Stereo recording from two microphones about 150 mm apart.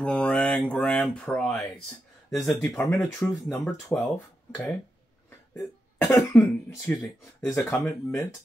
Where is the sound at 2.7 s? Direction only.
20° left (ahead or behind).